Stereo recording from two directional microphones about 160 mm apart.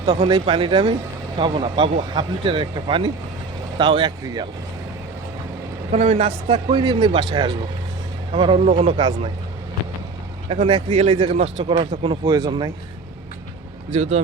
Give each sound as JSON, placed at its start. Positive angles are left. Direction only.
{"t": 0.0, "sound": "a man's voice", "side_deg": -35}
{"t": 5.9, "sound": "a man's voice", "side_deg": -40}
{"t": 10.5, "sound": "speech", "side_deg": -35}
{"t": 12.2, "sound": "a man's voice", "side_deg": -25}
{"t": 13.9, "sound": "speech", "side_deg": -40}